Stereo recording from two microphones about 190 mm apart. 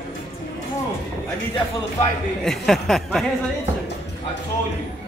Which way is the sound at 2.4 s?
Centre (ahead or behind).